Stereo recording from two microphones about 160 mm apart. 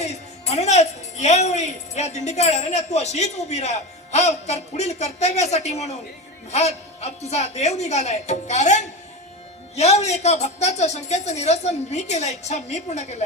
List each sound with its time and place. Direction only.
0.0 s speech: 45° left (ahead or behind)